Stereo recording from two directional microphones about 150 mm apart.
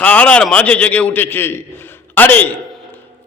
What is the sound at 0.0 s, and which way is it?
A man's voice, 10° left (ahead or behind).